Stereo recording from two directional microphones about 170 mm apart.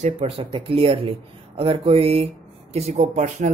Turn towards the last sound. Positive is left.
turn(degrees=-45)  # may be behind; listen again after turning